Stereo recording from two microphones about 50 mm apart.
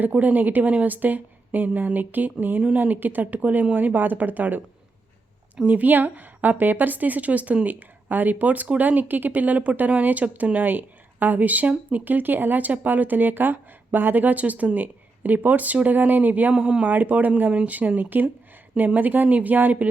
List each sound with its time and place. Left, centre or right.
0.1 s speech: right
5.6 s speech: right